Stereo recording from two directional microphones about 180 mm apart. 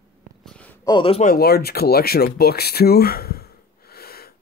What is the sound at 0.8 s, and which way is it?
Speech, 30° left (ahead or behind).